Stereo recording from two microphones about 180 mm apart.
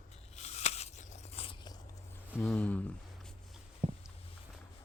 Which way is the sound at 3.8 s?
35° right (ahead or behind).